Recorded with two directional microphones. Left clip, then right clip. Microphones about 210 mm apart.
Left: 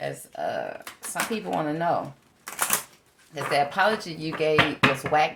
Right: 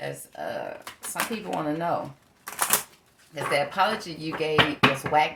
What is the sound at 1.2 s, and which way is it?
Speech, 30° left (ahead or behind).